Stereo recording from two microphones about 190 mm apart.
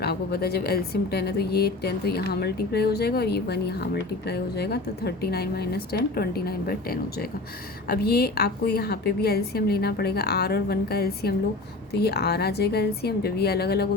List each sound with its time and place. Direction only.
0.0 s speech: 55° left (ahead or behind)